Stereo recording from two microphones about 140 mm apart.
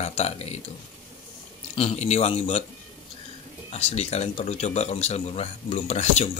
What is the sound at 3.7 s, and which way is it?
Speech, 50° left (ahead or behind).